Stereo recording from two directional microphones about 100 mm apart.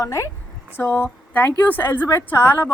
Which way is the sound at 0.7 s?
20° left (ahead or behind).